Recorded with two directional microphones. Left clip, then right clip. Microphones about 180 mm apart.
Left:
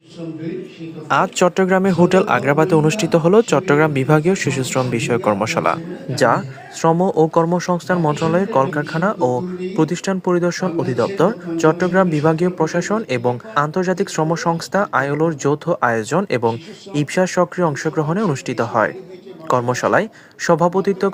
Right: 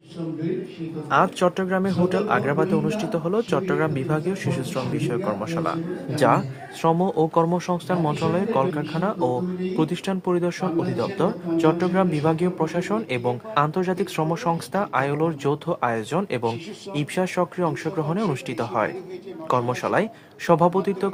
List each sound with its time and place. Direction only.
1.1 s speech: 55° left (ahead or behind)
6.1 s speech: 30° left (ahead or behind)